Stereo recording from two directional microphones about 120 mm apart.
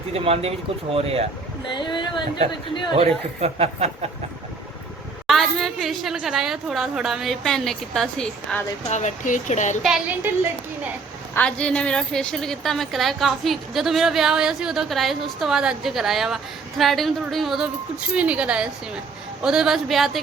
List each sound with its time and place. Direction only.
0.1 s a man's voice: 55° right (ahead or behind)
1.7 s speech: 40° left (ahead or behind)
2.9 s a man's voice: 55° right (ahead or behind)
5.2 s a woman's voice: centre (ahead or behind)
8.9 s speech: 80° left
11.3 s a woman's voice: 10° left (ahead or behind)